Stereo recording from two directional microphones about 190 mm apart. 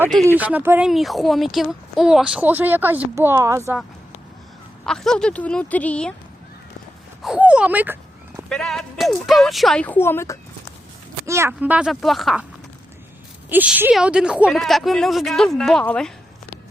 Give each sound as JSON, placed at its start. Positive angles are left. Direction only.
{"t": 0.3, "sound": "speech", "side_deg": -10}
{"t": 4.9, "sound": "a woman's voice", "side_deg": 5}
{"t": 7.2, "sound": "speech", "side_deg": -5}
{"t": 8.4, "sound": "a woman's voice", "side_deg": 0}
{"t": 11.3, "sound": "a woman's voice", "side_deg": -15}
{"t": 13.5, "sound": "a woman's voice", "side_deg": -10}